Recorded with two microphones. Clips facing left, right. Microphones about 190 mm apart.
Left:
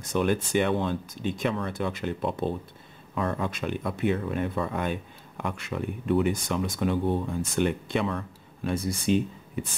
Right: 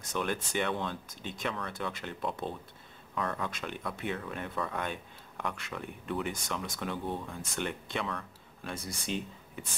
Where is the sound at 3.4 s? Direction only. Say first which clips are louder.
Left 8 dB; 15° left (ahead or behind).